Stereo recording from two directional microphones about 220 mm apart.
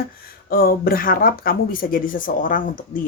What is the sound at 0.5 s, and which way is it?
Speech, 40° left (ahead or behind).